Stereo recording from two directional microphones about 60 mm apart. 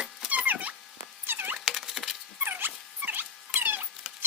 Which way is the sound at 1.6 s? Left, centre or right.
Centre.